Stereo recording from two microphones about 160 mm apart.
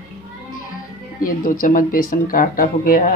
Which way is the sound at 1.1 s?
60° left (ahead or behind).